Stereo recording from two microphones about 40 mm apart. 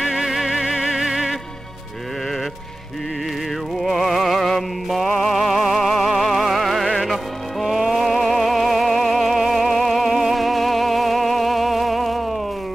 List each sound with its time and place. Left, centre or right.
0.0 s music: centre
0.7 s music: centre
3.8 s music: centre